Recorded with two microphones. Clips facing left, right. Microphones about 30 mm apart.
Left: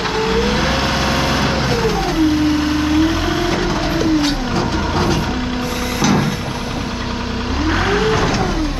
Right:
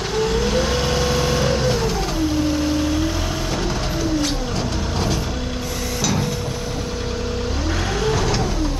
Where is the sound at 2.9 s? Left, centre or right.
Left.